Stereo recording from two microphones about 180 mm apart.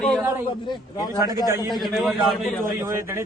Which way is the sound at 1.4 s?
15° right (ahead or behind).